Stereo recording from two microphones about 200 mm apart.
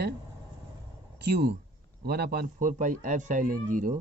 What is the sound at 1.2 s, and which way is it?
A man's voice, 55° right (ahead or behind).